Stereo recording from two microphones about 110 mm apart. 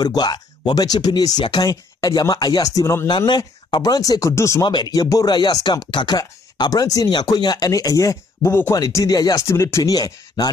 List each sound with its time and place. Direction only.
0.0 s speech: 40° left (ahead or behind)
3.1 s speech: 40° left (ahead or behind)
4.6 s speech: 40° left (ahead or behind); by 8.7 s 25° left (ahead or behind)
8.7 s speech: 35° left (ahead or behind)